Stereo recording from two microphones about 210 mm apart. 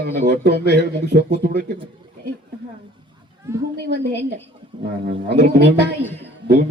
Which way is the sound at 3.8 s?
55° right (ahead or behind).